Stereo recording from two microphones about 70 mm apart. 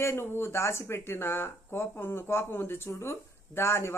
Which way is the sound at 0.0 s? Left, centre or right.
Left.